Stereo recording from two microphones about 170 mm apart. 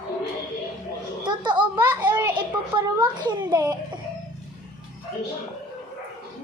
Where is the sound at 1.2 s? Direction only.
25° right (ahead or behind).